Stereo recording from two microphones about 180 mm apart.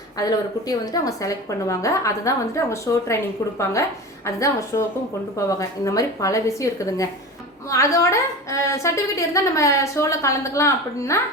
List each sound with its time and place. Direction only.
0.2 s a woman's voice: 20° left (ahead or behind)